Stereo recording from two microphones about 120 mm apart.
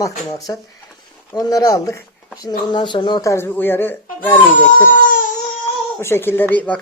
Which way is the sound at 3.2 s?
20° left (ahead or behind).